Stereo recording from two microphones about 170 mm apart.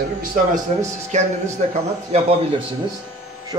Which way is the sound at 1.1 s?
40° right (ahead or behind).